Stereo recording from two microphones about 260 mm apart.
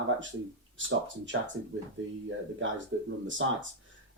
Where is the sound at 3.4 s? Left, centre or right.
Right.